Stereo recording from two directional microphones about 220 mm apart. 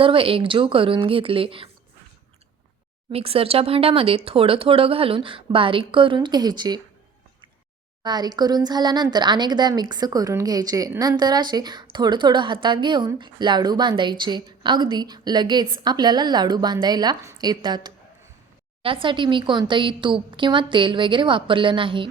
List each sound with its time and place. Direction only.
0.0 s speech: 25° right (ahead or behind)
3.1 s speech: 25° right (ahead or behind)
8.0 s speech: 20° right (ahead or behind)